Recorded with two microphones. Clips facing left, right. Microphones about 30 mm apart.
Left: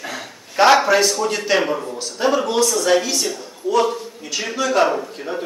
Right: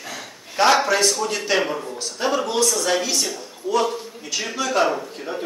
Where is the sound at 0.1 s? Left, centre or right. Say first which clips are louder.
Left 3 dB; centre.